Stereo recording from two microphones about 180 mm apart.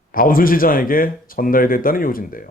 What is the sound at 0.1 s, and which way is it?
Speech, 50° left (ahead or behind).